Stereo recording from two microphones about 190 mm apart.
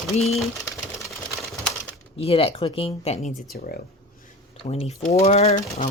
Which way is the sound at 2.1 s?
30° left (ahead or behind).